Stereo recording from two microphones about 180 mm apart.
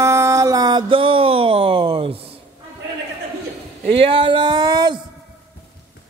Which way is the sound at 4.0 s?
30° right (ahead or behind).